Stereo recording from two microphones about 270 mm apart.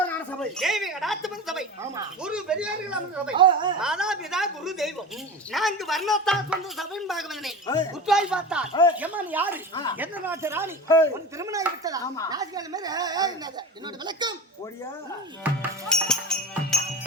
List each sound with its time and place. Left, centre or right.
0.0 s a woman's voice: centre
3.3 s speech: centre
3.8 s speech: centre
8.7 s speech: centre
9.0 s speech: centre
9.7 s speech: centre
10.0 s speech: centre
10.8 s speech: centre
11.1 s speech: centre
15.9 s music: centre